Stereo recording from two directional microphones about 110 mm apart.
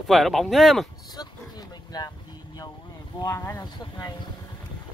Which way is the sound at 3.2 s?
30° left (ahead or behind).